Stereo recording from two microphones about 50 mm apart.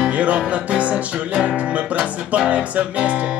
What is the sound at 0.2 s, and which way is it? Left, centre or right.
Music, right.